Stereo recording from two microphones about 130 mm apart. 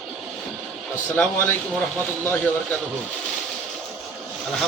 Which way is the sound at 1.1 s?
15° left (ahead or behind).